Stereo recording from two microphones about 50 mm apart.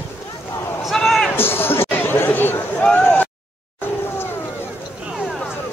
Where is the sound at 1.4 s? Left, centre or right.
Left.